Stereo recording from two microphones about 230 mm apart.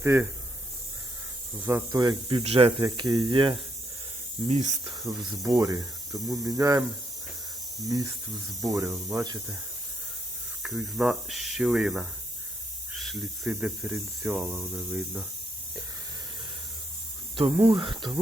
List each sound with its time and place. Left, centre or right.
0.0 s speech: centre
1.6 s speech: centre
5.0 s speech: centre
7.9 s speech: centre
10.6 s speech: centre
17.3 s speech: right